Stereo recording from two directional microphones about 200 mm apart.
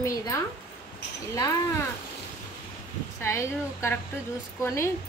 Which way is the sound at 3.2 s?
15° left (ahead or behind).